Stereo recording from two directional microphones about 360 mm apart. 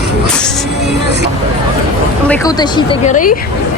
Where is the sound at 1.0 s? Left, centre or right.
Right.